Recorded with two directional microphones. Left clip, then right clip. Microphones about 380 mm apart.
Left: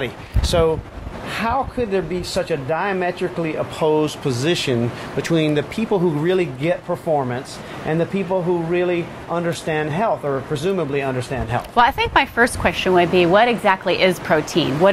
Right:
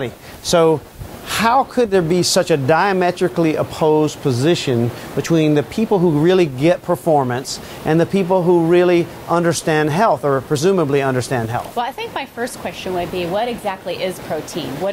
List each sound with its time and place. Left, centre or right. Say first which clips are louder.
0.0 s speech: even; right
1.3 s speech: right 7 dB; right
3.8 s speech: right 3 dB; right
11.7 s speech: left 7 dB; left